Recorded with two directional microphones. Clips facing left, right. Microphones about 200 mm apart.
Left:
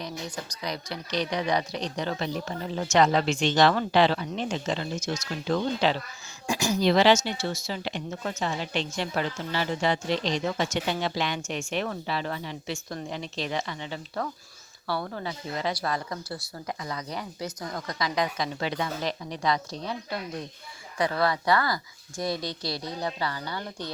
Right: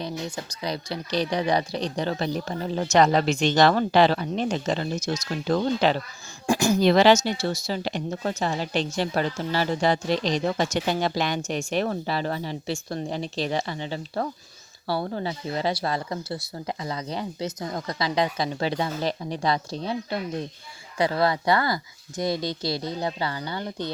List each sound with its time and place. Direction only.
0.0 s speech: 30° right (ahead or behind)